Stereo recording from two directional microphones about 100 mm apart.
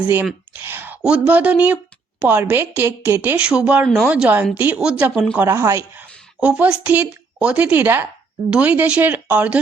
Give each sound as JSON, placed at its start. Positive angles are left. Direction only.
{"t": 0.6, "sound": "a sound", "side_deg": -20}
{"t": 1.0, "sound": "a woman's voice", "side_deg": -10}
{"t": 5.5, "sound": "speech", "side_deg": -25}
{"t": 6.0, "sound": "a woman's voice", "side_deg": -15}